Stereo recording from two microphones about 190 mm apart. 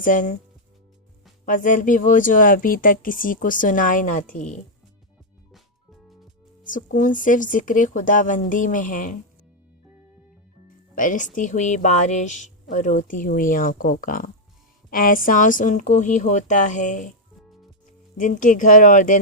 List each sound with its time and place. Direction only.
0.0 s speech: 45° left (ahead or behind)
1.5 s speech: 45° left (ahead or behind)
6.7 s speech: 45° left (ahead or behind)
10.9 s speech: 45° left (ahead or behind)
18.2 s speech: 45° left (ahead or behind)